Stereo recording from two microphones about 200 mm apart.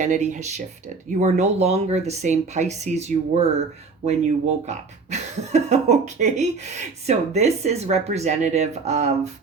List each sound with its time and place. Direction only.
0.0 s speech: 40° right (ahead or behind)